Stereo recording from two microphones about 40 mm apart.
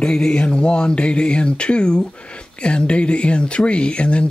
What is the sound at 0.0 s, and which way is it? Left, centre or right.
Speech, centre.